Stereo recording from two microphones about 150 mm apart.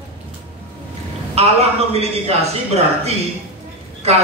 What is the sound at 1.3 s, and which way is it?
Speech, 45° right (ahead or behind).